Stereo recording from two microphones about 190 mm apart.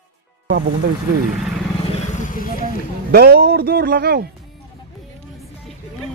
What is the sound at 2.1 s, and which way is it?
Vehicle, 40° left (ahead or behind).